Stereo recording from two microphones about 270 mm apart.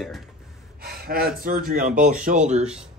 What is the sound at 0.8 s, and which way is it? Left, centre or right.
Speech, right.